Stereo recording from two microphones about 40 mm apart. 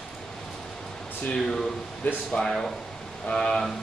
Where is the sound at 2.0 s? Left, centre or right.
Left.